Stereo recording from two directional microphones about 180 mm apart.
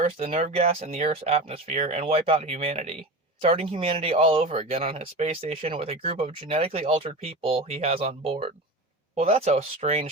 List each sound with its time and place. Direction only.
0.0 s speech: 45° right (ahead or behind)